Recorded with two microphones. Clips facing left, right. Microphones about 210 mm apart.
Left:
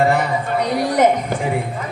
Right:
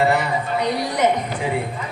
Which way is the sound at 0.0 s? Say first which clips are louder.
Left 2 dB; 50° left (ahead or behind).